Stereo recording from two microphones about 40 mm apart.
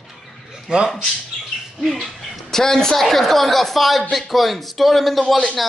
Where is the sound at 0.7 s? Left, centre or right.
Right.